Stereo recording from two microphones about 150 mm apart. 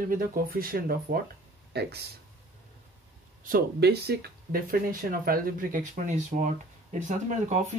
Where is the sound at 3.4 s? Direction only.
80° right; by 7.6 s 55° right (ahead or behind).